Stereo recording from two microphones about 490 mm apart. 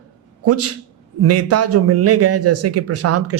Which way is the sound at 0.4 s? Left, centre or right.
Right.